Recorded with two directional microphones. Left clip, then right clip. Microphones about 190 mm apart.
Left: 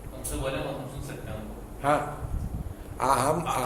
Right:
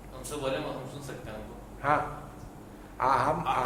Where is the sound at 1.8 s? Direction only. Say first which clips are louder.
Left 2 dB; 40° left (ahead or behind).